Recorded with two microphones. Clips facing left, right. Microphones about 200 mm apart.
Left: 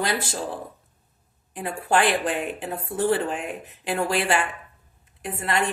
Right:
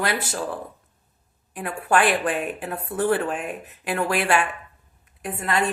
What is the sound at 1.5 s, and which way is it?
A woman's voice, 25° left (ahead or behind).